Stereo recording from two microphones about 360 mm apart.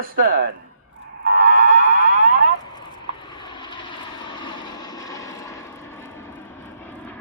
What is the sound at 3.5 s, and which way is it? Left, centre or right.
Vehicle, centre.